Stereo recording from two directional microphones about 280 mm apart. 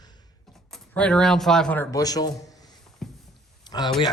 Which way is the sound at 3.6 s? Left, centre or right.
Centre.